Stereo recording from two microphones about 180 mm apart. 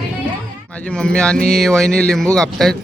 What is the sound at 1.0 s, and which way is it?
Speech, 5° left (ahead or behind).